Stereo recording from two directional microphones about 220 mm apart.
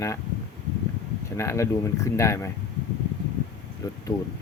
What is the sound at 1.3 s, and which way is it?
Speech, 10° left (ahead or behind).